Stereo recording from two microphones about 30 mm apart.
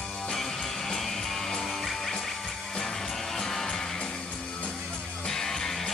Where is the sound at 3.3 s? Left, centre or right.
Centre.